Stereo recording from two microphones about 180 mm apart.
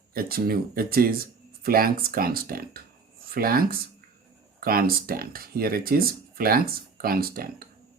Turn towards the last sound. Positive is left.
turn(degrees=-55)  # may be behind; listen again after turning